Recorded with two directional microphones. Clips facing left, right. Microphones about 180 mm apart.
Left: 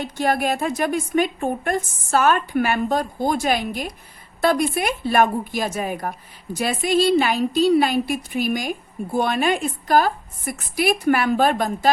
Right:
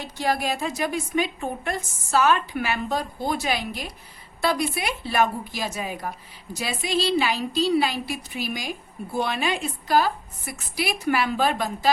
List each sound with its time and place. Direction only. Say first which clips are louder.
0.2 s a woman's voice: left 4 dB; 55° left (ahead or behind)